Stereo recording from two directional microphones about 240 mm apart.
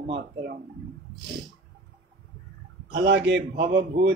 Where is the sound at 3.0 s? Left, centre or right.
Right.